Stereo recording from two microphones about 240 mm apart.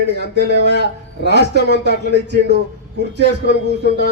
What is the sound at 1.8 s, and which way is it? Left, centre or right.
Speech, right.